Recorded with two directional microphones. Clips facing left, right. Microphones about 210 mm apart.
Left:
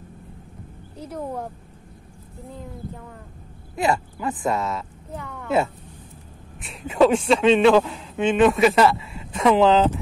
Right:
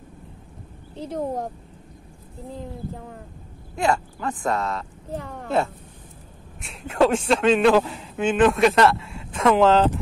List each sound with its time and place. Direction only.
0.9 s speech: 25° right (ahead or behind)
3.7 s a man's voice: 5° left (ahead or behind)
5.1 s speech: 35° right (ahead or behind)
6.6 s a man's voice: centre (ahead or behind)